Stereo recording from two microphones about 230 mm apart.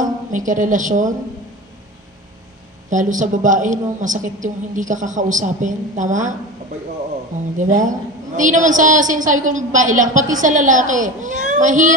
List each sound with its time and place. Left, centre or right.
0.0 s a woman's voice: right
2.9 s a woman's voice: right
7.5 s a woman's voice: right